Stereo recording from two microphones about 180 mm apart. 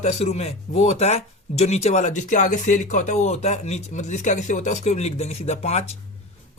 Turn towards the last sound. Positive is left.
turn(degrees=35)  # may be behind; listen again after turning